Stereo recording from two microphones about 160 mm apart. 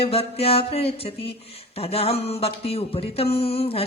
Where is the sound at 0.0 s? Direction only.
40° left (ahead or behind).